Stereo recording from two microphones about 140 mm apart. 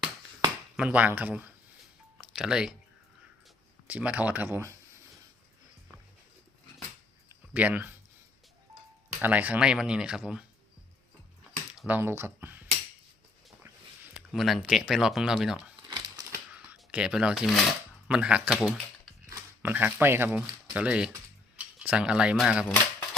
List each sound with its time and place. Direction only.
0.8 s speech: 10° right (ahead or behind)
2.1 s music: 5° right (ahead or behind)
3.8 s speech: 10° right (ahead or behind)
7.5 s speech: 10° right (ahead or behind)
9.2 s speech: 10° right (ahead or behind)
11.7 s speech: 10° right (ahead or behind)
14.1 s speech: 5° right (ahead or behind)
15.9 s a sound: 30° right (ahead or behind)
16.7 s speech: 5° right (ahead or behind)
19.3 s speech: 15° right (ahead or behind)
22.6 s speech: 15° left (ahead or behind)